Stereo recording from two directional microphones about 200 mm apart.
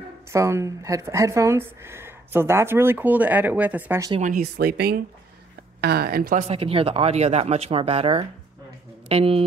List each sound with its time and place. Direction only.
0.3 s speech: 15° right (ahead or behind)
4.2 s speech: 45° right (ahead or behind)
6.4 s speech: 30° right (ahead or behind)